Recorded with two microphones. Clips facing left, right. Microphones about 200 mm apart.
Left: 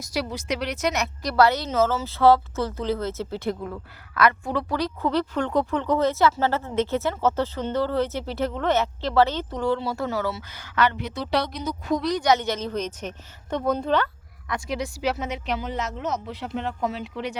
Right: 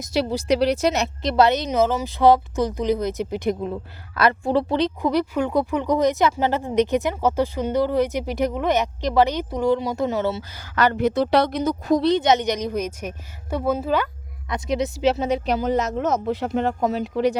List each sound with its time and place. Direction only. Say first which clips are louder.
0.0 s speech: right 6 dB; 25° right (ahead or behind)
5.0 s speech: right 3 dB; 10° right (ahead or behind)
10.6 s speech: right 5 dB; 40° right (ahead or behind)
11.9 s speech: right 3 dB; 25° right (ahead or behind); by 14.1 s 5° right (ahead or behind)
14.4 s speech: right 5 dB; 20° right (ahead or behind); by 17.3 s 40° right (ahead or behind)